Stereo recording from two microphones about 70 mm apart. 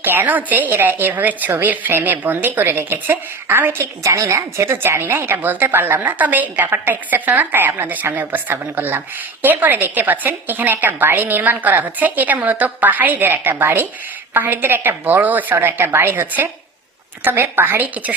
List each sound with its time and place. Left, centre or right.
0.0 s a woman's voice: right
4.0 s a woman's voice: right